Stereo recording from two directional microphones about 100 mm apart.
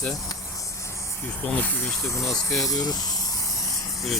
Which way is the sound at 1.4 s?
15° left (ahead or behind).